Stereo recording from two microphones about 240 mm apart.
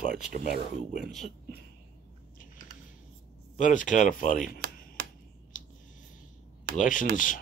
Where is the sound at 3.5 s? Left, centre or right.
Left.